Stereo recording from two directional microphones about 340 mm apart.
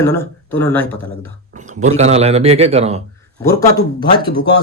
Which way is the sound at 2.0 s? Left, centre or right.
Centre.